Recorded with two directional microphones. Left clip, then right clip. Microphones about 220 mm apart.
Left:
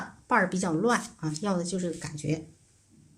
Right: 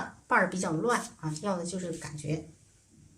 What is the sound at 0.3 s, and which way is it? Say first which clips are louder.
A woman's voice: left 1 dB; 30° left (ahead or behind).